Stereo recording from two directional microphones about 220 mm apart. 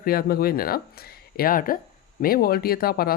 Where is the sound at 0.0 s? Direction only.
45° left (ahead or behind).